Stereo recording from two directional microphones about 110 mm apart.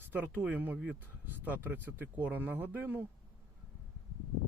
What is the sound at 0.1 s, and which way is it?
Speech, 15° right (ahead or behind).